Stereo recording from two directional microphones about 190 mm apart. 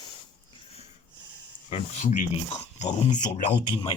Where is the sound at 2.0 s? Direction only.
40° left (ahead or behind).